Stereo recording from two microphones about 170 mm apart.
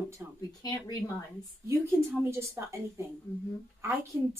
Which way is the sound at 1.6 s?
15° right (ahead or behind).